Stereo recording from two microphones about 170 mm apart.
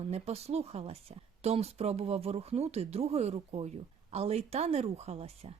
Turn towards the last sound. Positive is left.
turn(degrees=-35)  # may be behind; listen again after turning